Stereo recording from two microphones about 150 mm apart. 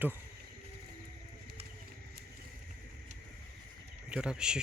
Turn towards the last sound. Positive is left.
turn(degrees=-5)  # may be behind; listen again after turning